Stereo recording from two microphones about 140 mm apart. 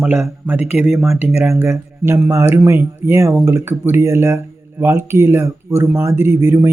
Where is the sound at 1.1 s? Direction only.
15° right (ahead or behind).